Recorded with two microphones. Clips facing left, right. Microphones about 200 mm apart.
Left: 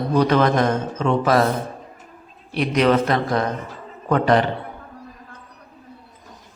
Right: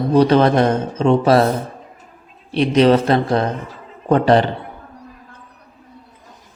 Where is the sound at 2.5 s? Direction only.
30° right (ahead or behind).